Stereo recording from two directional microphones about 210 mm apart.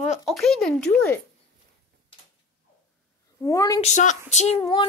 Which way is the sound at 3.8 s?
35° left (ahead or behind).